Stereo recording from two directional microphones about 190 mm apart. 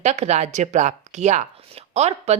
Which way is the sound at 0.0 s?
35° right (ahead or behind).